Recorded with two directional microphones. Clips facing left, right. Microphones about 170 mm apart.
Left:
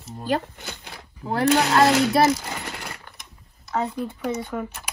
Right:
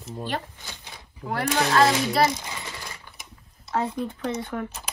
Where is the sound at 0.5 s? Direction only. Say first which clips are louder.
Left 5 dB; 65° left (ahead or behind).